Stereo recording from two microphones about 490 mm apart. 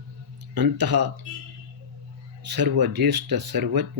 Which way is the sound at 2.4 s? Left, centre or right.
Right.